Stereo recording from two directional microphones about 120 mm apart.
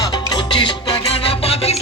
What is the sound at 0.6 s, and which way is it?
Music, 45° left (ahead or behind).